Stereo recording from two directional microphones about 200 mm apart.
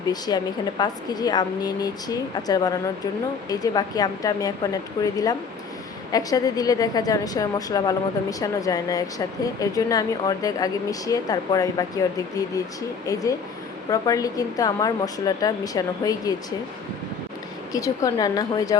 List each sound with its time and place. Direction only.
0.1 s a woman's voice: 20° left (ahead or behind)
17.7 s a woman's voice: 15° left (ahead or behind)